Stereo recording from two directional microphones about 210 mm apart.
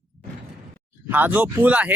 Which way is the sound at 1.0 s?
10° right (ahead or behind).